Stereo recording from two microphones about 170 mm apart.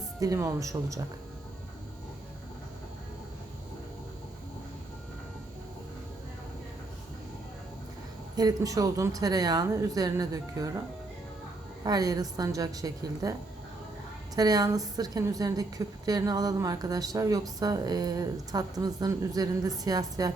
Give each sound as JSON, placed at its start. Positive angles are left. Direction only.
{"t": 0.2, "sound": "speech", "side_deg": -20}
{"t": 8.4, "sound": "speech", "side_deg": -20}
{"t": 11.8, "sound": "speech", "side_deg": -20}
{"t": 14.3, "sound": "speech", "side_deg": -20}